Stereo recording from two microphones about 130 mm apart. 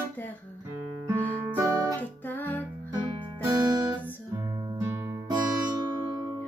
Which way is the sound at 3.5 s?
30° right (ahead or behind).